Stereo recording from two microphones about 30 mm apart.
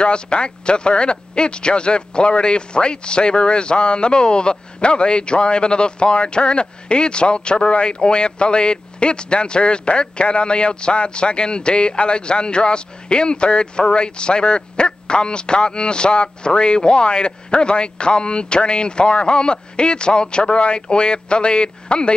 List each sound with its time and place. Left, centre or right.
0.0 s speech: left